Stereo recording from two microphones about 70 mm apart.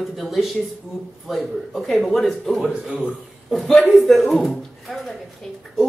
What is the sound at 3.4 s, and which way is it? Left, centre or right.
A man's voice, centre.